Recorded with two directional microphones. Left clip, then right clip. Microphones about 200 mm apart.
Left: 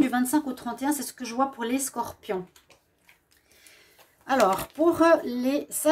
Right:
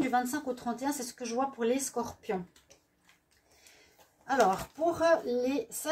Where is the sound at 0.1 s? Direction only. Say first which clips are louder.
Left 4 dB; 45° left (ahead or behind).